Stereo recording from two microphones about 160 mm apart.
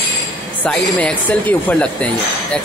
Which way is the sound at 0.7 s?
5° left (ahead or behind).